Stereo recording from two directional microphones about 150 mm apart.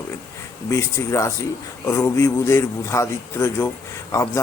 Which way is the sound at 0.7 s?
20° left (ahead or behind).